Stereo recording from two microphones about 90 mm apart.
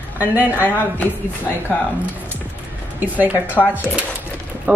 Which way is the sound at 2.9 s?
20° right (ahead or behind).